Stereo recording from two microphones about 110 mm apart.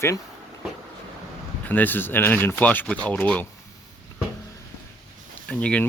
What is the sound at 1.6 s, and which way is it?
Speech, 15° left (ahead or behind).